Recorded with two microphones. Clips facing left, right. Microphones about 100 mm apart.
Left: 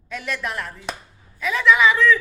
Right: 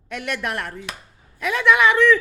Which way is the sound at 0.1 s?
60° right (ahead or behind).